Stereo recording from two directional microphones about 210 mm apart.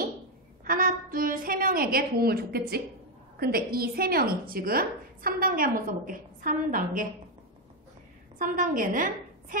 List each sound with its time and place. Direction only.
0.7 s a sound: 40° right (ahead or behind)
3.3 s a woman's voice: 45° right (ahead or behind)
8.4 s a woman's voice: 40° right (ahead or behind)